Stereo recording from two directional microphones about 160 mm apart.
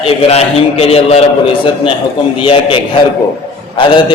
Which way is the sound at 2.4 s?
35° left (ahead or behind).